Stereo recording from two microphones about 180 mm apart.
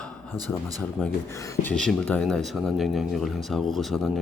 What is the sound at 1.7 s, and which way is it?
Speech, 5° left (ahead or behind).